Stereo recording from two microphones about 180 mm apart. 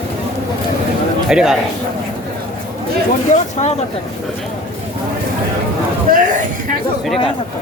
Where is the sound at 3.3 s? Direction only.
45° left (ahead or behind).